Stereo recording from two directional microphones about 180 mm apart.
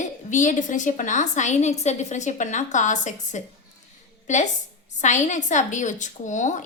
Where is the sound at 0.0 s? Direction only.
45° left (ahead or behind).